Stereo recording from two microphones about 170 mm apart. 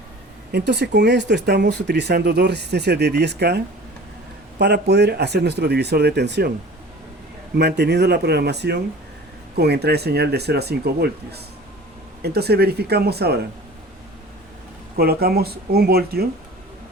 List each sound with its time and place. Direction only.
0.5 s speech: 80° right
7.6 s speech: 80° right
14.9 s speech: 65° right (ahead or behind)